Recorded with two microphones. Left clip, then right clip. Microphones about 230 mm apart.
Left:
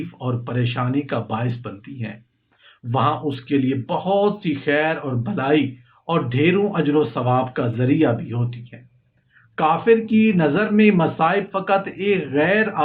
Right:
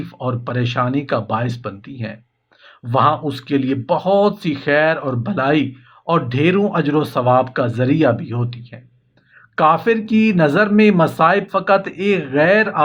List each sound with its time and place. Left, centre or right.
0.2 s speech: right
9.6 s speech: right